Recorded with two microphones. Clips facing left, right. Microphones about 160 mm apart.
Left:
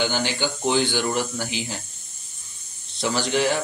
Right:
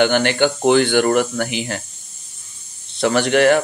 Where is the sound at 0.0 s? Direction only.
65° right (ahead or behind).